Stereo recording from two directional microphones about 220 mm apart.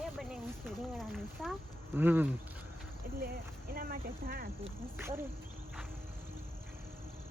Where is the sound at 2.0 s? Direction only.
10° right (ahead or behind).